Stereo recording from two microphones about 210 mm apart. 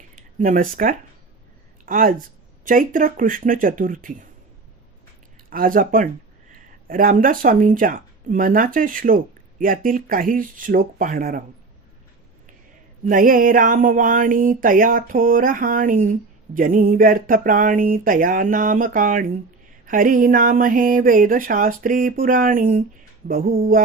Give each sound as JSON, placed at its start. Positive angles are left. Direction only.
{"t": 0.2, "sound": "a woman's voice", "side_deg": -40}
{"t": 5.5, "sound": "speech", "side_deg": -40}
{"t": 13.1, "sound": "speech", "side_deg": -40}
{"t": 23.3, "sound": "mantra", "side_deg": -45}